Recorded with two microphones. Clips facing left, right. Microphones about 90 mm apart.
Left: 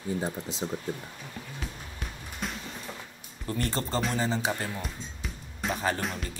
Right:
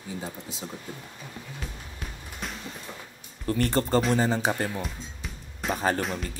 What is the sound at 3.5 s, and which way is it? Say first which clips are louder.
Speech: right 6 dB; 55° right (ahead or behind).